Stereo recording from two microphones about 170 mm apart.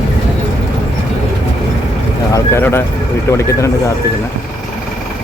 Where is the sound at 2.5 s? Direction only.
15° left (ahead or behind).